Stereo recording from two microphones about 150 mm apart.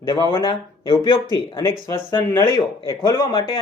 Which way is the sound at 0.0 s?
30° left (ahead or behind).